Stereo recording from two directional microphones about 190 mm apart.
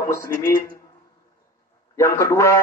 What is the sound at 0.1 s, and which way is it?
Speech, 15° left (ahead or behind).